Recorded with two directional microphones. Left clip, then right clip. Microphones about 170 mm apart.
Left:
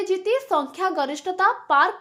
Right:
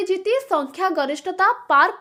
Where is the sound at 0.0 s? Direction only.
20° right (ahead or behind).